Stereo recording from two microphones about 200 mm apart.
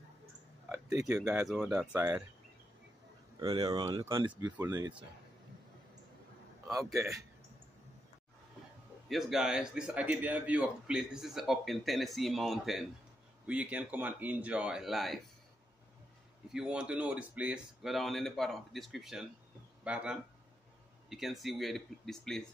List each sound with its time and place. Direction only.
0.9 s speech: 15° right (ahead or behind)
3.3 s speech: 20° right (ahead or behind)
6.7 s speech: 15° right (ahead or behind)
9.1 s a man's voice: centre (ahead or behind)
16.5 s a man's voice: 5° right (ahead or behind)